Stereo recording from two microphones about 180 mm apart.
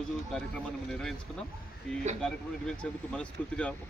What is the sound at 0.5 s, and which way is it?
Speech, 5° left (ahead or behind).